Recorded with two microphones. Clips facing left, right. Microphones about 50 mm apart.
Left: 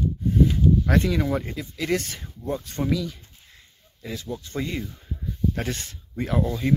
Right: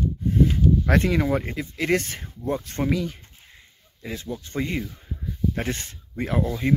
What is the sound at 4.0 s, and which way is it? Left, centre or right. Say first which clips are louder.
Speech: even; right.